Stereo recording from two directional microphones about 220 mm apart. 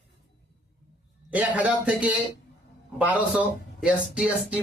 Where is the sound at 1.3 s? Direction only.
5° right (ahead or behind).